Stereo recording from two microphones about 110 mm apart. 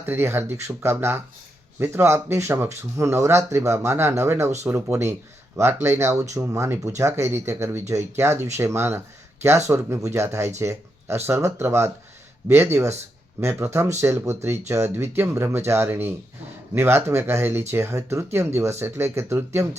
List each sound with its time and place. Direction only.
0.0 s speech: 20° right (ahead or behind)